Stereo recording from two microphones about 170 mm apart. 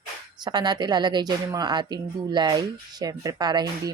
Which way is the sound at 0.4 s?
25° right (ahead or behind).